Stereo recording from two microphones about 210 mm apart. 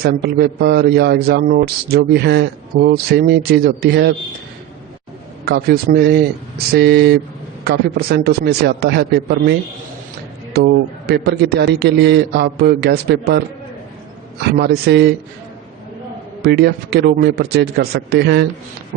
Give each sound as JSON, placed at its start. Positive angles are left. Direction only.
{"t": 0.0, "sound": "a man's voice", "side_deg": -50}
{"t": 5.5, "sound": "a man's voice", "side_deg": -50}
{"t": 14.6, "sound": "a man's voice", "side_deg": -50}
{"t": 16.4, "sound": "a man's voice", "side_deg": -50}